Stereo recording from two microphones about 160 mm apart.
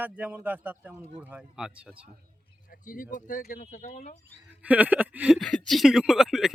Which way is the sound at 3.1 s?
60° left (ahead or behind).